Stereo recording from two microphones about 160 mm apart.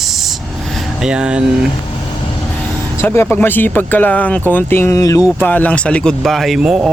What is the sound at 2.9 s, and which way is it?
Speech, 15° left (ahead or behind).